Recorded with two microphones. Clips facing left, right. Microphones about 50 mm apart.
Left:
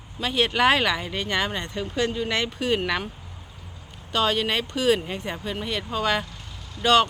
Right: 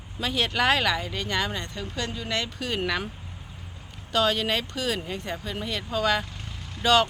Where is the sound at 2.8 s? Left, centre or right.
Centre.